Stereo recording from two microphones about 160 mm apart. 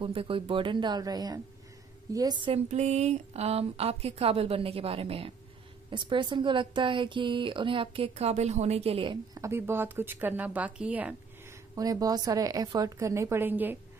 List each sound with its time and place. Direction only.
0.0 s a woman's voice: 35° right (ahead or behind)
2.7 s a woman's voice: 45° right (ahead or behind); by 11.5 s 10° right (ahead or behind)
11.7 s a woman's voice: 20° right (ahead or behind)